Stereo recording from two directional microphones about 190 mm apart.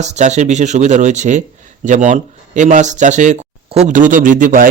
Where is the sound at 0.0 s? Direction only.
35° right (ahead or behind).